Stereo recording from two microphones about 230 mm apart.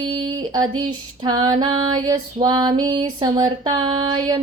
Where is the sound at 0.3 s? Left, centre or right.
Centre.